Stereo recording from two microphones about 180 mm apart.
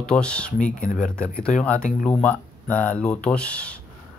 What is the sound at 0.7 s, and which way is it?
Speech, 45° left (ahead or behind).